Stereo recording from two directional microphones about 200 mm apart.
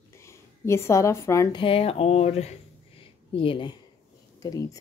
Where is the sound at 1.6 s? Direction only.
30° left (ahead or behind).